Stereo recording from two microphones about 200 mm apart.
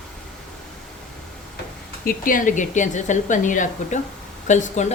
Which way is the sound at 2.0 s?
45° left (ahead or behind).